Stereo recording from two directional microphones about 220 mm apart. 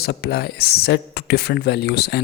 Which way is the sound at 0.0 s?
50° left (ahead or behind).